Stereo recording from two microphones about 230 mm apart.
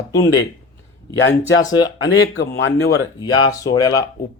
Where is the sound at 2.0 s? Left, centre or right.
Left.